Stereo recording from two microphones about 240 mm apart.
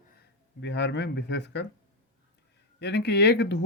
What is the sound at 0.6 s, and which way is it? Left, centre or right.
Speech, left.